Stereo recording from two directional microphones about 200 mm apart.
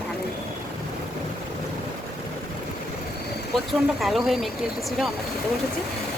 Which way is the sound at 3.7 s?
Centre (ahead or behind).